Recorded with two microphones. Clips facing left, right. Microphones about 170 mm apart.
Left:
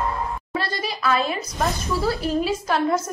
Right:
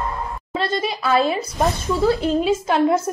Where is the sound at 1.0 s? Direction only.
30° right (ahead or behind).